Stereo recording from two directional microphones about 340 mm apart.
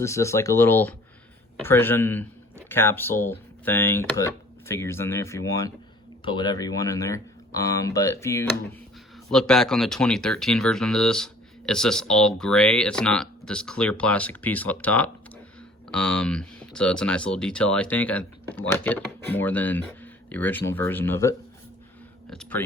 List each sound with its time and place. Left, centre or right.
0.0 s speech: centre